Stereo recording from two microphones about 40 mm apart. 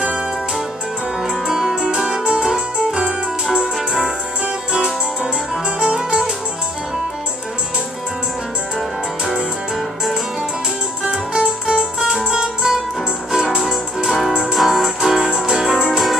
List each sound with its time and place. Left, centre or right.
1.2 s music: centre
4.7 s music: centre
11.1 s music: centre